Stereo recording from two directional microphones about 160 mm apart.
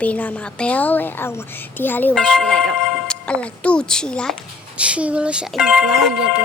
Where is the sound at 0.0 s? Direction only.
10° left (ahead or behind).